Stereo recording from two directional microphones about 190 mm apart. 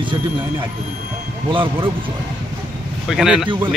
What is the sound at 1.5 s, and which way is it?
Speech, 25° right (ahead or behind).